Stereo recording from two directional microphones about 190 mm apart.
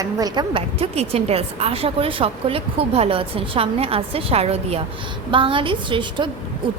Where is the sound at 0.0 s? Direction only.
20° right (ahead or behind).